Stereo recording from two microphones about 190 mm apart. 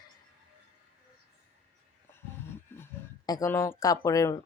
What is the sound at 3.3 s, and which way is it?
A woman's voice, 15° left (ahead or behind).